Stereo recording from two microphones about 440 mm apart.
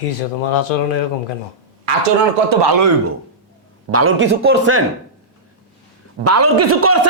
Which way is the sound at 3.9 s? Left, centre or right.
Right.